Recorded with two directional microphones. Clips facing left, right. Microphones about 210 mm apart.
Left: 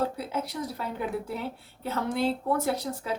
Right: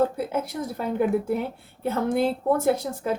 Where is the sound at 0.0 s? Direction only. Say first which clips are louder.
Right 6 dB; 50° right (ahead or behind).